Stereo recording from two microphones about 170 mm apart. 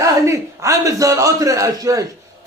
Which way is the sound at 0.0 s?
20° right (ahead or behind).